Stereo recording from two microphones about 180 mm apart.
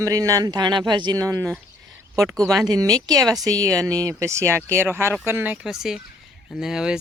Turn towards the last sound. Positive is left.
turn(degrees=-5)  # may be behind; listen again after turning